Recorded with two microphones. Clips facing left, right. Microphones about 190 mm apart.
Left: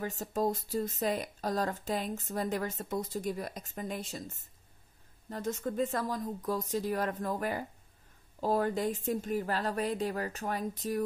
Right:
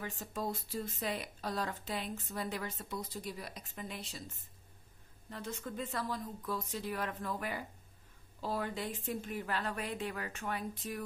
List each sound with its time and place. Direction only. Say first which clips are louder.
0.0 s a woman's voice: left 8 dB; 40° left (ahead or behind)
5.3 s a woman's voice: left 8 dB; 45° left (ahead or behind)